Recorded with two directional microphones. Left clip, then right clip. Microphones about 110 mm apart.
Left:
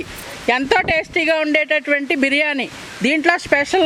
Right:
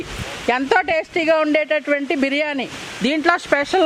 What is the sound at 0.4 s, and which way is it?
Speech, 40° left (ahead or behind).